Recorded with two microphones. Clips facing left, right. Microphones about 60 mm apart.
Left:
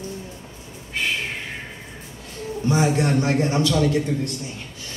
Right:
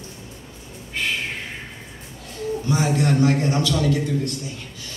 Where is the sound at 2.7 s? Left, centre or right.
Left.